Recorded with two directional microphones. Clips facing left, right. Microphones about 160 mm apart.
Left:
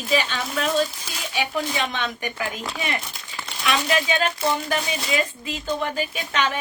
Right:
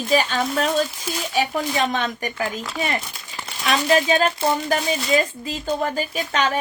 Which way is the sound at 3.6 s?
40° right (ahead or behind).